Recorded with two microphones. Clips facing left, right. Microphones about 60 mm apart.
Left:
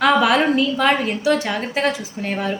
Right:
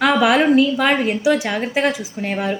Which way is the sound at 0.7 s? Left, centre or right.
Centre.